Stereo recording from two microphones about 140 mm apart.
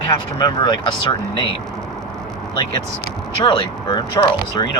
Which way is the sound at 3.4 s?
35° left (ahead or behind).